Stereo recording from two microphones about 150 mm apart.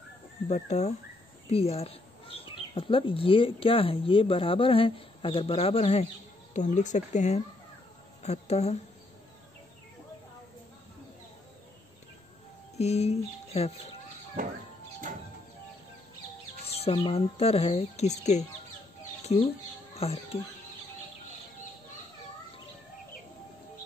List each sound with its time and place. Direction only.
0.5 s speech: 50° left (ahead or behind)
6.5 s speech: 55° left (ahead or behind)
12.7 s speech: 45° left (ahead or behind)
16.6 s speech: 40° left (ahead or behind)
19.3 s speech: 40° left (ahead or behind)